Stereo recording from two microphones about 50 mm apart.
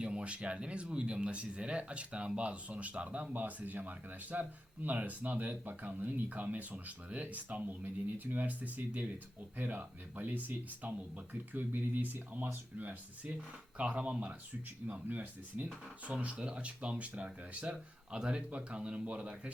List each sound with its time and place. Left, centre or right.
0.0 s speech: right
13.3 s speech: centre
15.0 s speech: right
16.2 s speech: right